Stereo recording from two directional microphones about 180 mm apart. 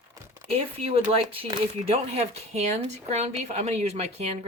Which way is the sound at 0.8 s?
35° right (ahead or behind).